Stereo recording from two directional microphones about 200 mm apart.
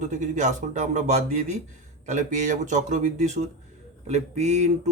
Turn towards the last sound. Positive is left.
turn(degrees=-35)  # may be behind; listen again after turning